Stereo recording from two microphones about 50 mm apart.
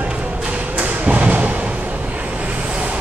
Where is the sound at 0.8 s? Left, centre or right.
Right.